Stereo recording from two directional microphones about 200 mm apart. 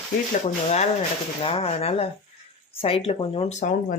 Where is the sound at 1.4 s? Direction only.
30° left (ahead or behind).